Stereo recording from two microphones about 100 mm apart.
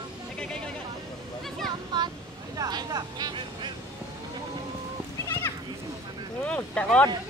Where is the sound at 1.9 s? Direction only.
45° right (ahead or behind).